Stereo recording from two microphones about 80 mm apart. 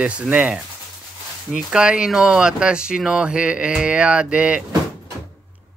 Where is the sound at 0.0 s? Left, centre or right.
Centre.